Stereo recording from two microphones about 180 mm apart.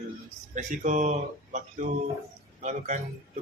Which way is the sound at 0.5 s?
40° right (ahead or behind).